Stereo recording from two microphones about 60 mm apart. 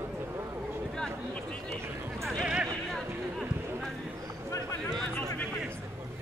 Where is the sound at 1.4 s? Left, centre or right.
Centre.